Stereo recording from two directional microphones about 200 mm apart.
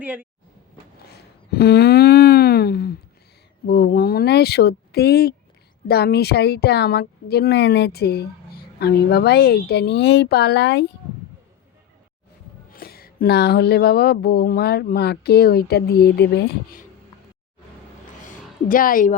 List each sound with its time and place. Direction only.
0.0 s speech: 10° right (ahead or behind)
1.5 s a sound: 50° left (ahead or behind)
3.7 s a woman's voice: 50° left (ahead or behind)
12.7 s a woman's voice: 50° left (ahead or behind)
18.7 s a woman's voice: 45° left (ahead or behind)